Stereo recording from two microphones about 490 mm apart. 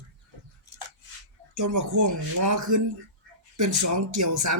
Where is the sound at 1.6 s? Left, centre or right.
Right.